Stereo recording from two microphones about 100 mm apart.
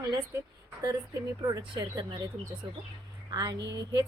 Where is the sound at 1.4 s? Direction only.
40° right (ahead or behind).